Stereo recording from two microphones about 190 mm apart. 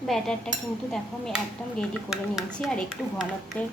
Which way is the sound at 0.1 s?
5° left (ahead or behind).